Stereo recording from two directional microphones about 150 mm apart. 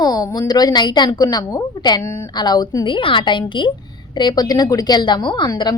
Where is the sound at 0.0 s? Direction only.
25° left (ahead or behind).